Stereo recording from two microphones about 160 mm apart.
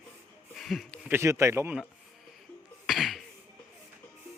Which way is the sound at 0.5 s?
Centre (ahead or behind).